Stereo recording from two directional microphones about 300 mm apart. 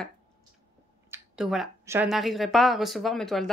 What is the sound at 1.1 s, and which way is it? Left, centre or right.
Speech, centre.